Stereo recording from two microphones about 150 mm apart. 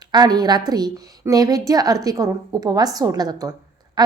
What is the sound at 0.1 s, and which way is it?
A woman's voice, 30° right (ahead or behind).